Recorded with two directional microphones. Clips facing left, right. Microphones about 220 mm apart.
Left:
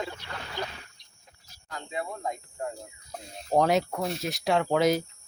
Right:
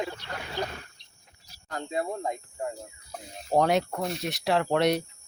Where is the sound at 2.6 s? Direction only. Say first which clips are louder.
Even; 5° right (ahead or behind).